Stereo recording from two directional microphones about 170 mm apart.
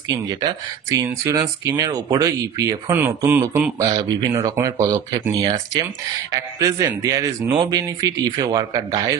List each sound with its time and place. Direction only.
0.1 s speech: 25° right (ahead or behind)